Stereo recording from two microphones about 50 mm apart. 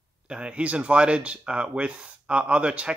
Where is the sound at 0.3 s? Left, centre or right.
Right.